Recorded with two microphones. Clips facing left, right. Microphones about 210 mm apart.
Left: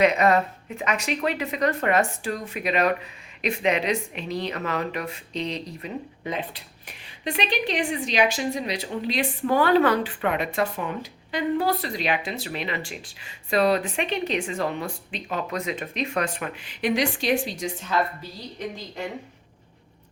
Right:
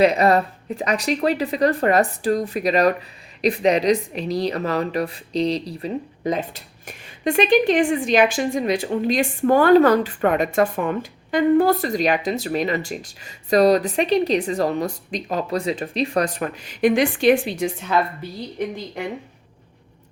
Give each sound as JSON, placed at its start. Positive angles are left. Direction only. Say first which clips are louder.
{"t": 0.0, "sound": "a woman's voice", "louder": "right 3 dB", "side_deg": -35}